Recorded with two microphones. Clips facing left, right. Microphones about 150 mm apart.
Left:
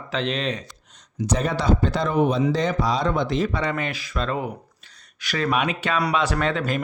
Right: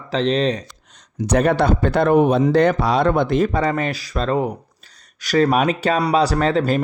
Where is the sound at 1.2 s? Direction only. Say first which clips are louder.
Right 7 dB; 65° right (ahead or behind).